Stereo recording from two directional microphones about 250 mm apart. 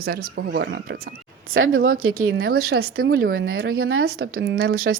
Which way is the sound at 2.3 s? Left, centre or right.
Right.